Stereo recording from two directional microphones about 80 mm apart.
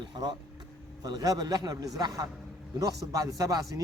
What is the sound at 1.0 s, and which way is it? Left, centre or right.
A man's voice, right.